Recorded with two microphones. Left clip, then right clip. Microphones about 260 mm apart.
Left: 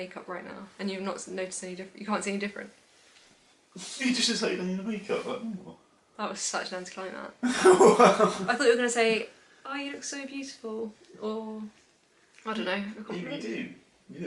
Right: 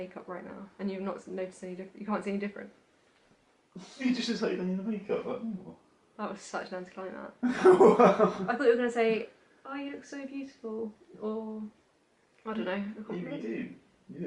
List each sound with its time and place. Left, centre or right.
0.0 s a woman's voice: centre
3.8 s a woman's voice: centre
10.6 s speech: right
12.4 s a woman's voice: centre